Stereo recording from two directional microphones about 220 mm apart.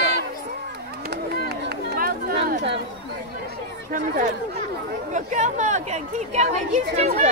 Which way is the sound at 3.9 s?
35° right (ahead or behind).